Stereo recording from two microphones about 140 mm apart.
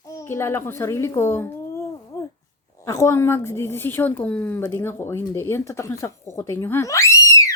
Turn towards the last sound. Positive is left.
turn(degrees=20)  # may be behind; listen again after turning